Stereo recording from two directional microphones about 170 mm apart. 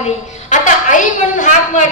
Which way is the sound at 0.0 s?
45° left (ahead or behind).